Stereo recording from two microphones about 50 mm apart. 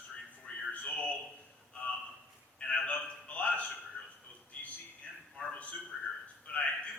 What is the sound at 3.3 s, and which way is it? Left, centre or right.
Music, left.